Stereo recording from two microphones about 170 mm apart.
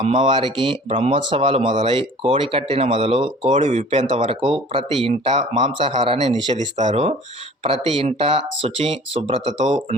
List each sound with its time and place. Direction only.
0.0 s speech: 40° right (ahead or behind)
0.3 s speech: 30° right (ahead or behind)